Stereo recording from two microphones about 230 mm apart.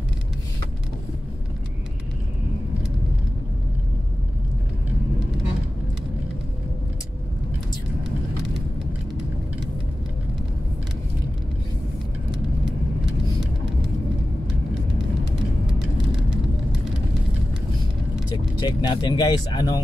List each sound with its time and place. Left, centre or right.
18.6 s speech: left